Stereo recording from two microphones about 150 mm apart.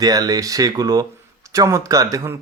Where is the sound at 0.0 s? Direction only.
25° right (ahead or behind).